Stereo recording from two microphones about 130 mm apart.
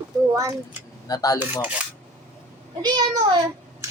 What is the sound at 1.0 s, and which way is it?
Speech, 30° left (ahead or behind).